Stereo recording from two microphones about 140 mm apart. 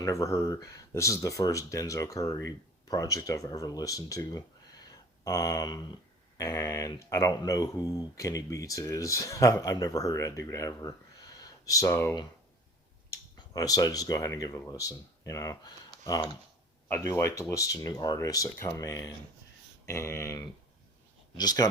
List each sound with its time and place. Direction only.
0.0 s speech: 20° left (ahead or behind)